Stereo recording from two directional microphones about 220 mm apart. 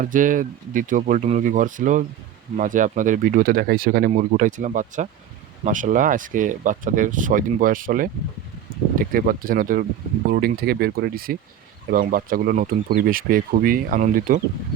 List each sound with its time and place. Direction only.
0.0 s speech: 35° right (ahead or behind)